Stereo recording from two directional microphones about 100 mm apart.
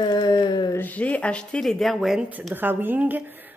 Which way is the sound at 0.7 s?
15° left (ahead or behind).